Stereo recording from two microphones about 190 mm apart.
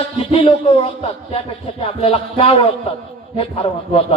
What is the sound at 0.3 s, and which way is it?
A man's voice, 30° left (ahead or behind).